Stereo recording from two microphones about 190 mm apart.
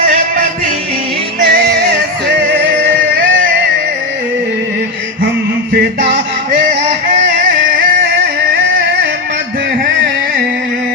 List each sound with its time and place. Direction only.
0.0 s music: 50° right (ahead or behind)
1.5 s music: 60° right (ahead or behind)
6.5 s music: 45° right (ahead or behind)